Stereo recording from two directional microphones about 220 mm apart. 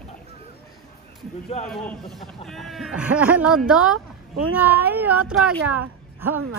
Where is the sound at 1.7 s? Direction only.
Centre (ahead or behind).